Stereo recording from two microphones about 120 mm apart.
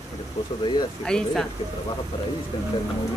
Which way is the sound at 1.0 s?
5° left (ahead or behind).